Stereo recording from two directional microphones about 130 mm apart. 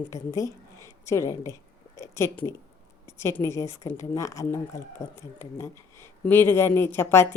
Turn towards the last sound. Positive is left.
turn(degrees=15)  # may be behind; listen again after turning